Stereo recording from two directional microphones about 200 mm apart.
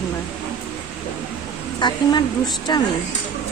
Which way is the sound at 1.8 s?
20° left (ahead or behind).